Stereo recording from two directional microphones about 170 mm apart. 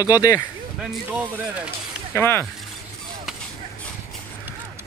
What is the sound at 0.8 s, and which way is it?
Speech, 10° right (ahead or behind).